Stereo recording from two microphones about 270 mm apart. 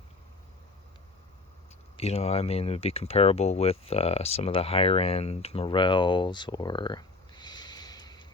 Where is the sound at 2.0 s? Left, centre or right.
Left.